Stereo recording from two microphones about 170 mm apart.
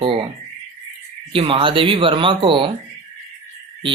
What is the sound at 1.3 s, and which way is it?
Speech, 30° right (ahead or behind).